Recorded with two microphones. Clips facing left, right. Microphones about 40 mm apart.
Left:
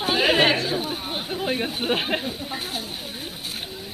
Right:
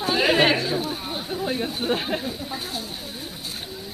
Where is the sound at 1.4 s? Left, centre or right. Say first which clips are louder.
Left 1 dB; left.